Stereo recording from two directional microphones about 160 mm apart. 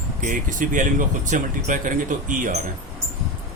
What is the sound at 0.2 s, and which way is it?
Speech, 55° right (ahead or behind).